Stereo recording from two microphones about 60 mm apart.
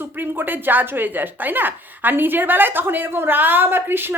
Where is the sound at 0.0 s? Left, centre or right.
Right.